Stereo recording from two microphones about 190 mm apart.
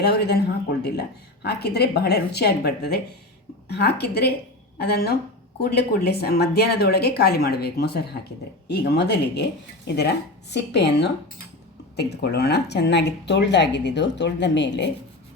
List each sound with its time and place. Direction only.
0.0 s speech: 60° left (ahead or behind)